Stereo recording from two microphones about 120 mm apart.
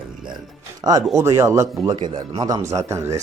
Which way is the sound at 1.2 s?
25° right (ahead or behind).